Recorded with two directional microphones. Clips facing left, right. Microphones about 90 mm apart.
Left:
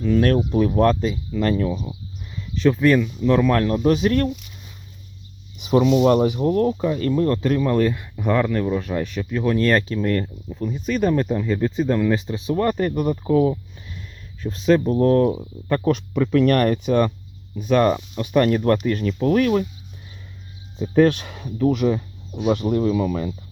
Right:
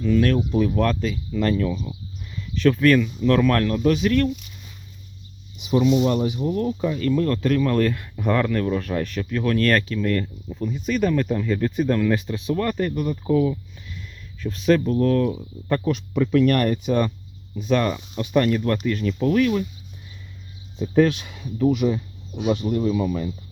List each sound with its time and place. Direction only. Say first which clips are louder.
0.1 s speech: left 2 dB; 40° left (ahead or behind)
0.7 s speech: left 4 dB; 30° left (ahead or behind)
3.8 s speech: even; 40° left (ahead or behind)
5.6 s speech: left 3 dB; 50° left (ahead or behind); by 15.4 s 30° left (ahead or behind)
15.8 s speech: left 2 dB; 55° left (ahead or behind)
17.7 s speech: left 4 dB; 40° left (ahead or behind)
21.0 s speech: left 3 dB; 50° left (ahead or behind)
22.5 s speech: left 3 dB; 65° left (ahead or behind)